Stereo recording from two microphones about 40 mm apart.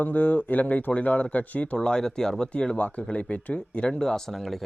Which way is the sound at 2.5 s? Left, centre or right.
Left.